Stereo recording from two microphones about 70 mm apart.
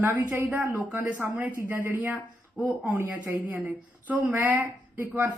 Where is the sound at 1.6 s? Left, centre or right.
Right.